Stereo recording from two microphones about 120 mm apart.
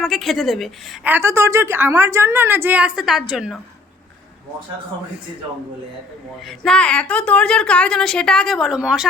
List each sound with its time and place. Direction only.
0.0 s a woman's voice: centre (ahead or behind)
1.0 s a woman's voice: 20° right (ahead or behind)
6.7 s a woman's voice: 10° left (ahead or behind)